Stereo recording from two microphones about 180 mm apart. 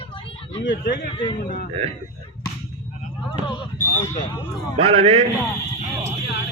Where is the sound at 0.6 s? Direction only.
75° left (ahead or behind).